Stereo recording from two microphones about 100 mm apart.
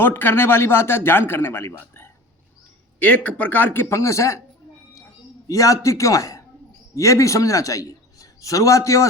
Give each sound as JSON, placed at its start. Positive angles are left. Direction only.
{"t": 0.0, "sound": "speech", "side_deg": 20}
{"t": 3.0, "sound": "speech", "side_deg": 15}
{"t": 5.5, "sound": "a man's voice", "side_deg": 35}